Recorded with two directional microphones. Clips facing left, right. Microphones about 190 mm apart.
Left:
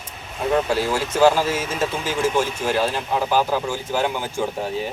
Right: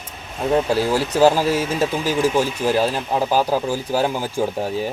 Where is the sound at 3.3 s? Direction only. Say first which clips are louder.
Right 1 dB; 10° right (ahead or behind).